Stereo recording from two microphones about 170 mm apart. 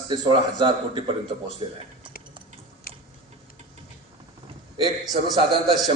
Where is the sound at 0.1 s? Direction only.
30° right (ahead or behind).